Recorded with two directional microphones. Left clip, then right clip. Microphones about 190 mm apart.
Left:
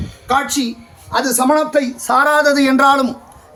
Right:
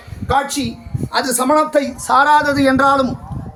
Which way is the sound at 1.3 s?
50° left (ahead or behind).